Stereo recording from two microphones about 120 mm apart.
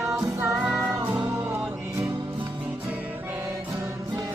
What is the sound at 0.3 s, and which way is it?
Music, 25° right (ahead or behind).